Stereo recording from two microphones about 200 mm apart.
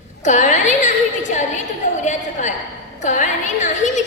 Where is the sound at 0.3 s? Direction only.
35° left (ahead or behind).